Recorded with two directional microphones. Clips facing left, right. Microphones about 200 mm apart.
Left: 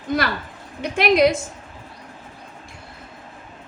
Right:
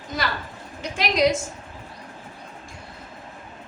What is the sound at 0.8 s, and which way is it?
Speech, 60° left (ahead or behind).